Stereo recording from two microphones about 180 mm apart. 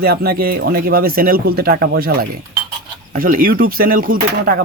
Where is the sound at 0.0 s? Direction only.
55° right (ahead or behind).